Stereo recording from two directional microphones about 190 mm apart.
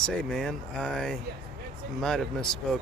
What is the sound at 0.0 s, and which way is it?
Speech, centre (ahead or behind).